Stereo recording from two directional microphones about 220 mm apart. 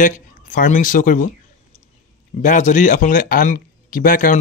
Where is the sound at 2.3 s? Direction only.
35° left (ahead or behind).